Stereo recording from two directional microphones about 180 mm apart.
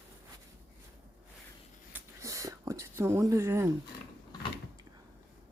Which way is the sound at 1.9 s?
15° right (ahead or behind).